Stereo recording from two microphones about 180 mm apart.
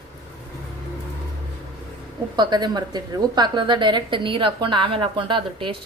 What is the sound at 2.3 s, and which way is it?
A woman's voice, 25° right (ahead or behind).